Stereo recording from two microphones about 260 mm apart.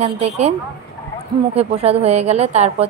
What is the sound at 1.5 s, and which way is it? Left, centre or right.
A woman's voice, right.